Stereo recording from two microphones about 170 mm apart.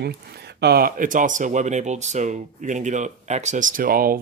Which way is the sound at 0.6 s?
65° right (ahead or behind).